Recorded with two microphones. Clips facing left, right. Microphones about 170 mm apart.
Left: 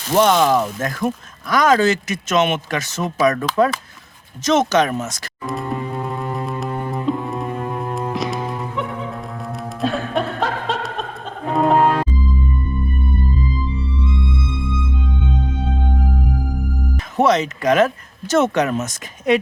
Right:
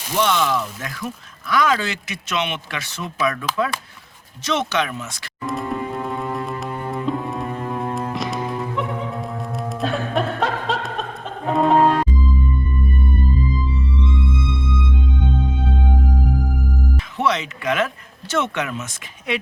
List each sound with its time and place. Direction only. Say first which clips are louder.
0.1 s speech: left 6 dB; 45° left (ahead or behind)
4.4 s speech: left 6 dB; 45° left (ahead or behind)
5.5 s music: even; centre (ahead or behind)
17.2 s speech: left 7 dB; 40° left (ahead or behind)